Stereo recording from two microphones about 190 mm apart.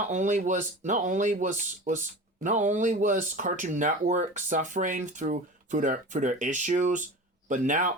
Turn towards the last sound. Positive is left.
turn(degrees=-45)  # may be behind; listen again after turning